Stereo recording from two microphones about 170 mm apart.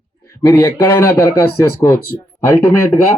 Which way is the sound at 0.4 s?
15° left (ahead or behind).